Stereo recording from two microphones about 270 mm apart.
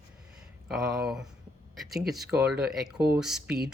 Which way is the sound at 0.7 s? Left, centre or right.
Centre.